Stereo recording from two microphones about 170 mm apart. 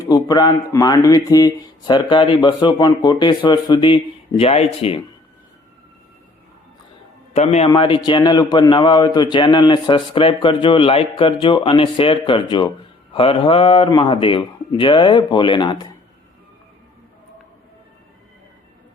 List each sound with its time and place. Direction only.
0.0 s speech: 25° left (ahead or behind)
7.3 s a man's voice: 40° left (ahead or behind)